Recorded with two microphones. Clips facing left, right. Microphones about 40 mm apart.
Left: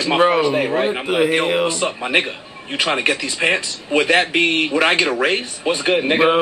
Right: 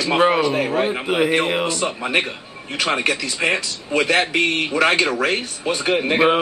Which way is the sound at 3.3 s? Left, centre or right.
Centre.